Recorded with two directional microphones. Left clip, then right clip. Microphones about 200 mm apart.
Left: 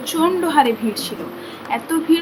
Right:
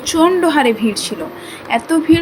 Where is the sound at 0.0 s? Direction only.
20° right (ahead or behind).